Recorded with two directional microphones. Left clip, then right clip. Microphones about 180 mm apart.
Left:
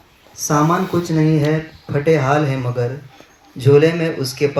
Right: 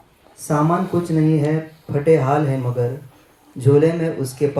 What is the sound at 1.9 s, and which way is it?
Speech, 15° right (ahead or behind).